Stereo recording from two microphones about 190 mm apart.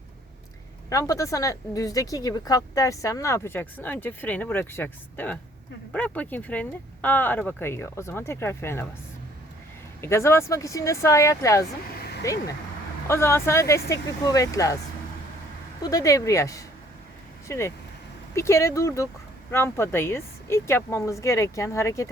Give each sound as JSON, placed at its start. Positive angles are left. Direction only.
{"t": 0.9, "sound": "speech", "side_deg": 15}
{"t": 10.0, "sound": "speech", "side_deg": 15}
{"t": 15.8, "sound": "speech", "side_deg": 20}